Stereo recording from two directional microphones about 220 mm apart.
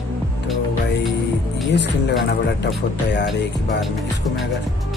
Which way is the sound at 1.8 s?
50° left (ahead or behind).